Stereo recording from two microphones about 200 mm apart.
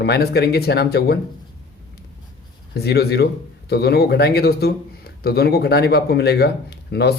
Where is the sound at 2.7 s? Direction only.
55° left (ahead or behind).